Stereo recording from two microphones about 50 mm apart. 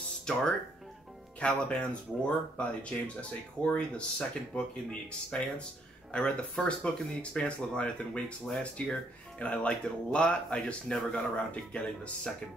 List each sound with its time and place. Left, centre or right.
0.2 s speech: centre
1.4 s speech: left